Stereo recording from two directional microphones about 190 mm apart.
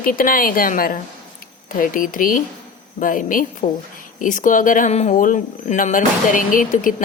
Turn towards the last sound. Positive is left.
turn(degrees=45)  # may be behind; listen again after turning